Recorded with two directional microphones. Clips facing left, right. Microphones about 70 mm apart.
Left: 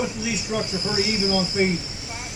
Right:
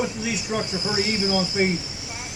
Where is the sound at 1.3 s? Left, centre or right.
Right.